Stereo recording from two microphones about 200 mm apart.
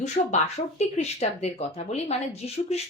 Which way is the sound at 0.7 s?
35° left (ahead or behind).